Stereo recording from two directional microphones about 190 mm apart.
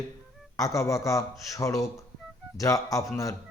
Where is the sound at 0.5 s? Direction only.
15° left (ahead or behind).